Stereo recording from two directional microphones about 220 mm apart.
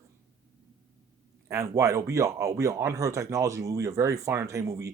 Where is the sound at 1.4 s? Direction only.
15° right (ahead or behind).